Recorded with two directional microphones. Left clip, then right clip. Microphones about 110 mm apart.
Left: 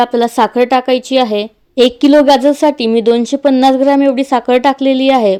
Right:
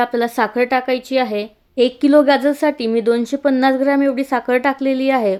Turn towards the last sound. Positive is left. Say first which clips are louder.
# left 6 dB
turn(degrees=25)  # may be behind; listen again after turning